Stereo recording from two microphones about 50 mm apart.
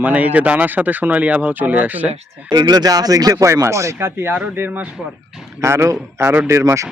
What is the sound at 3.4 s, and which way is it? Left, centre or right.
Speech, right.